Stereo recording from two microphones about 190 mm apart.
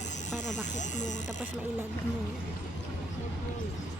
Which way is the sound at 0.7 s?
40° left (ahead or behind).